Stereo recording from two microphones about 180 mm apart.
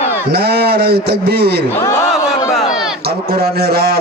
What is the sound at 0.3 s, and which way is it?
Speech, 60° right (ahead or behind).